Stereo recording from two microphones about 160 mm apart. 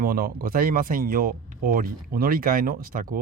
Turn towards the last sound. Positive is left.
turn(degrees=-60)  # may be behind; listen again after turning